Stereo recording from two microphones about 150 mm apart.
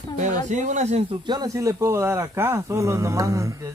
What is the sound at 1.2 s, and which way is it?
Speech, 25° right (ahead or behind).